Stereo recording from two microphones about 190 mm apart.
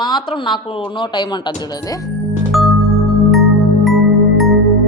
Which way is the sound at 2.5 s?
Centre (ahead or behind).